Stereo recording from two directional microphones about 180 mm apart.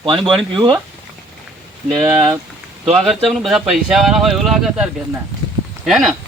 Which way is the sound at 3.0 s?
Centre (ahead or behind).